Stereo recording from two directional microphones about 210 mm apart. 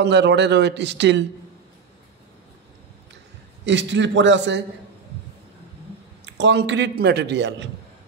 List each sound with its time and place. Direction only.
0.0 s a man's voice: 55° right (ahead or behind)
3.6 s a man's voice: 60° right (ahead or behind)
6.2 s a man's voice: 55° right (ahead or behind)